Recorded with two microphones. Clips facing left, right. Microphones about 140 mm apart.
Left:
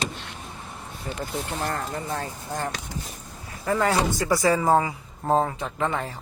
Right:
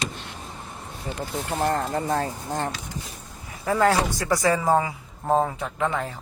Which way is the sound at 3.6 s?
Centre (ahead or behind).